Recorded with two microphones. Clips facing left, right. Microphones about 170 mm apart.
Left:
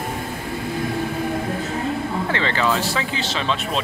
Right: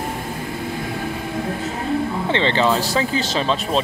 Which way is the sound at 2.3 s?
25° right (ahead or behind).